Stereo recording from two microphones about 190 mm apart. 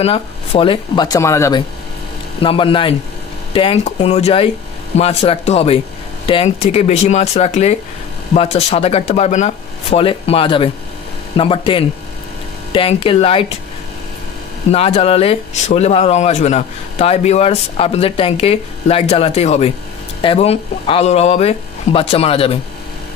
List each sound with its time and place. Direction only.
0.0 s speech: 30° left (ahead or behind); by 1.6 s 15° left (ahead or behind)
2.4 s speech: 25° left (ahead or behind)
14.7 s speech: 30° left (ahead or behind)